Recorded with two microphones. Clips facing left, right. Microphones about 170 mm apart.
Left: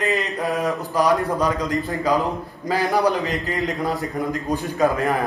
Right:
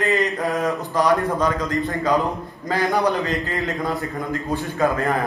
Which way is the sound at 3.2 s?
15° left (ahead or behind).